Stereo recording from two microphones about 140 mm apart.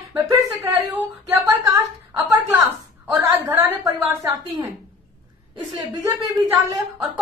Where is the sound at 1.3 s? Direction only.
25° right (ahead or behind).